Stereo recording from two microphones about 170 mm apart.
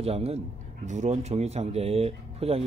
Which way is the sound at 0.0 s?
35° right (ahead or behind).